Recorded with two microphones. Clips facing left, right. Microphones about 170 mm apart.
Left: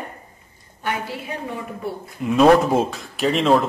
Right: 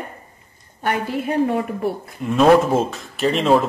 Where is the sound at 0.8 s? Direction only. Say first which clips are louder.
Right 5 dB; 50° right (ahead or behind).